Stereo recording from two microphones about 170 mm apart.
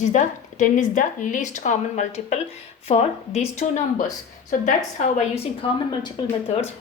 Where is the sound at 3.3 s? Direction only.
45° left (ahead or behind).